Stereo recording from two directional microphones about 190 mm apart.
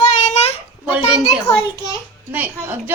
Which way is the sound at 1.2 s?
20° left (ahead or behind).